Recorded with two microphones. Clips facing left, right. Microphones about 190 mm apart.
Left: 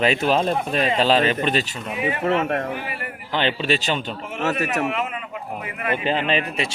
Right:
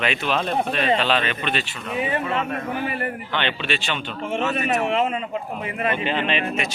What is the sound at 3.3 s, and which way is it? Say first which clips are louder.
Speech: left 6 dB; 35° left (ahead or behind).